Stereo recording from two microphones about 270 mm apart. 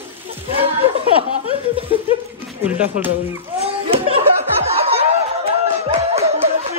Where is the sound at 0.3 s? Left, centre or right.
Right.